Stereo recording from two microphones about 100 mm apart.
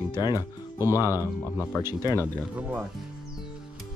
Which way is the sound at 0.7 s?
25° right (ahead or behind).